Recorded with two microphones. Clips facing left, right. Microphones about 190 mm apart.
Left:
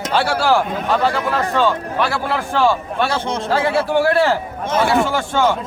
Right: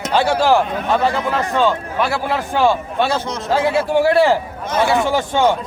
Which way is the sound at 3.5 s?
10° right (ahead or behind).